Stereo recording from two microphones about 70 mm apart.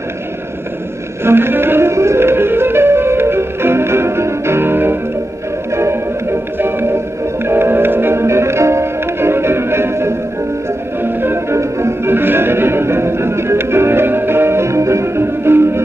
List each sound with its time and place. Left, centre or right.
1.2 s music: right
6.6 s music: right